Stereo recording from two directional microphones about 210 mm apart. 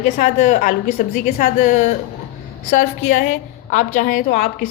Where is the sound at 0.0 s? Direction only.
40° left (ahead or behind).